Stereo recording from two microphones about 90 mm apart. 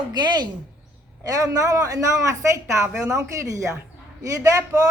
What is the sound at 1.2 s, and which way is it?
Speech, 40° right (ahead or behind).